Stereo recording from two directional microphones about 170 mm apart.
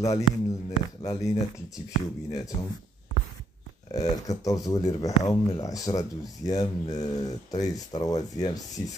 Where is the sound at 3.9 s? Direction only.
20° left (ahead or behind).